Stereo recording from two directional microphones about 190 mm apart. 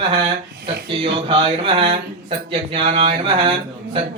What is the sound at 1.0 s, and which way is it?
Speech, 30° right (ahead or behind).